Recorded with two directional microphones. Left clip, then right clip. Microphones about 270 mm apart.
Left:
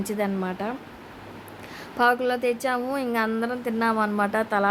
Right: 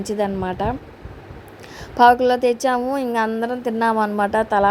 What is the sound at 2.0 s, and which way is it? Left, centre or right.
A woman's voice, centre.